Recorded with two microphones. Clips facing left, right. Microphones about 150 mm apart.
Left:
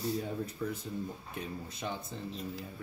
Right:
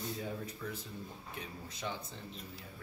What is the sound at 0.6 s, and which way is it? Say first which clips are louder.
Speech: left 8 dB; 40° left (ahead or behind).